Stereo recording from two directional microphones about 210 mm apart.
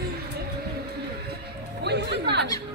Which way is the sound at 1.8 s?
55° right (ahead or behind).